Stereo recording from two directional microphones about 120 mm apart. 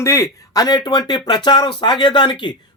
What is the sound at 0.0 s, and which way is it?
Speech, 25° left (ahead or behind).